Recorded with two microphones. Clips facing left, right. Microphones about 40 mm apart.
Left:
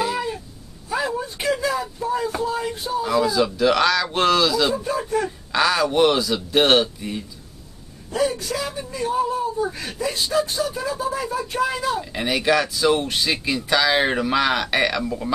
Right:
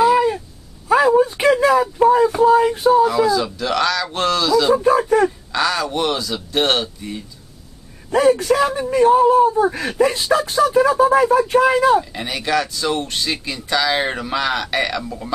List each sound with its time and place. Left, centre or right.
0.0 s a sound: right
1.1 s a sound: right
3.1 s speech: centre
4.8 s speech: right
5.5 s speech: centre
8.1 s speech: right
12.0 s speech: centre